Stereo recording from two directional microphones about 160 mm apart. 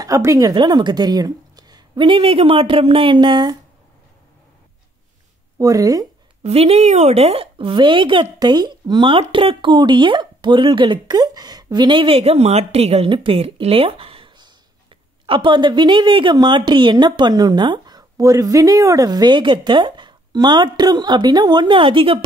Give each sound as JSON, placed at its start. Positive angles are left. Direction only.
{"t": 0.0, "sound": "speech", "side_deg": -20}
{"t": 5.6, "sound": "speech", "side_deg": -20}
{"t": 6.4, "sound": "a woman's voice", "side_deg": -40}